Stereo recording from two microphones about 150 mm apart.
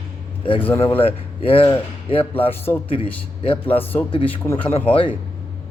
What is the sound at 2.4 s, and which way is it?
Speech, 15° left (ahead or behind).